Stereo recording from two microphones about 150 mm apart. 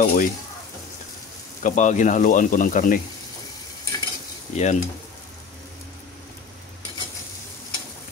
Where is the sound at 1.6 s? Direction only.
55° left (ahead or behind).